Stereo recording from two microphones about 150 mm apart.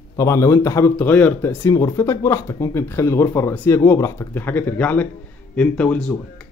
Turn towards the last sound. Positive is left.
turn(degrees=10)  # may be behind; listen again after turning